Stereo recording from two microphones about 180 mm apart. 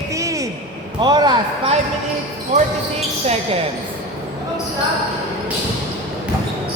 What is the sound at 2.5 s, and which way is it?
Basketball bounce, 35° right (ahead or behind).